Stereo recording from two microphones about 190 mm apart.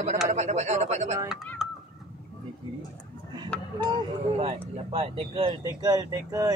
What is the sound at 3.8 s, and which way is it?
Speech, 25° right (ahead or behind).